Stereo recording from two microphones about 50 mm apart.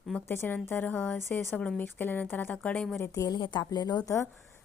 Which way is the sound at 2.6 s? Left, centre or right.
Left.